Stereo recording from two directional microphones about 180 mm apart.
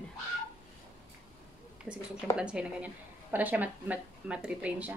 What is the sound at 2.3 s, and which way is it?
A woman's voice, 5° right (ahead or behind).